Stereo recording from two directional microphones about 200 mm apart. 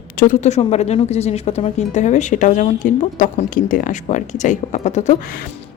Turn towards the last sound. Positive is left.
turn(degrees=35)  # may be behind; listen again after turning